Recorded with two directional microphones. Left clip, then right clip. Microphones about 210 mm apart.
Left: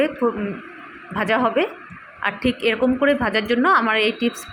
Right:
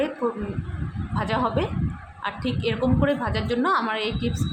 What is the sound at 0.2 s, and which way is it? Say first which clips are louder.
A woman's voice: left 5 dB; 25° left (ahead or behind).